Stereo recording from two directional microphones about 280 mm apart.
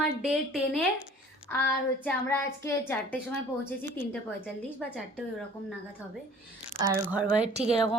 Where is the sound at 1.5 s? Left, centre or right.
Centre.